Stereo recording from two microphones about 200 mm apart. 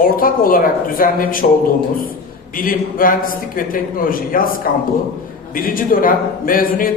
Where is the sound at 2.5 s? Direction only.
45° left (ahead or behind).